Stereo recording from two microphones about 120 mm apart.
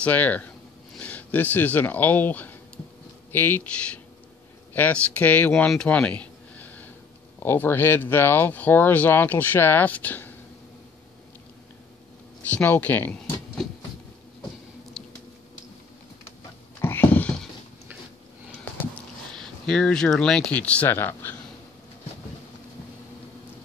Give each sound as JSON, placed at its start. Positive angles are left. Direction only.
{"t": 0.0, "sound": "speech", "side_deg": 15}
{"t": 5.7, "sound": "a sound", "side_deg": 10}
{"t": 7.4, "sound": "speech", "side_deg": 15}
{"t": 12.5, "sound": "speech", "side_deg": 15}
{"t": 15.0, "sound": "a sound", "side_deg": 5}
{"t": 16.8, "sound": "cat", "side_deg": 20}
{"t": 19.3, "sound": "speech", "side_deg": 5}